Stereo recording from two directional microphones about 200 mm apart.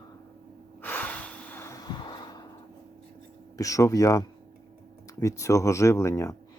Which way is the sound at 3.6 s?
15° left (ahead or behind).